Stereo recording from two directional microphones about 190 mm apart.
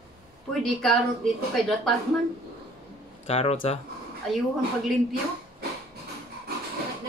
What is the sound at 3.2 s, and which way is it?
Speech, 35° left (ahead or behind).